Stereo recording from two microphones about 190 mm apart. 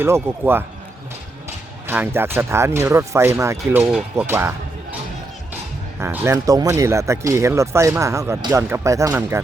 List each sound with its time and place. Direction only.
0.0 s speech: 10° right (ahead or behind)
1.9 s speech: 10° right (ahead or behind)
6.0 s speech: 15° right (ahead or behind)